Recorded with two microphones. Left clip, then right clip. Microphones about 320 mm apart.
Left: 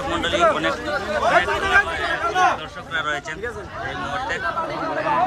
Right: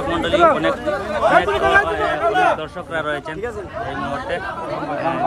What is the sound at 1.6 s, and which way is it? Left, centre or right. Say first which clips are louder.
A man's voice: right 3 dB; centre.